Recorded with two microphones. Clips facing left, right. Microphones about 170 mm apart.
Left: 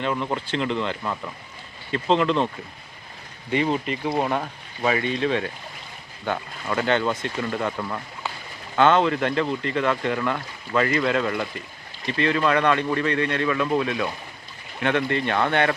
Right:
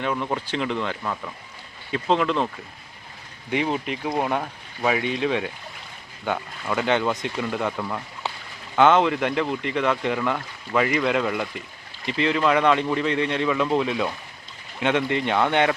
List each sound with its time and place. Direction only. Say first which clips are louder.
0.0 s speech: even; 5° right (ahead or behind)
1.0 s speech: even; 5° left (ahead or behind)
3.5 s speech: left 2 dB; 10° right (ahead or behind)
8.7 s speech: right 1 dB; 15° right (ahead or behind)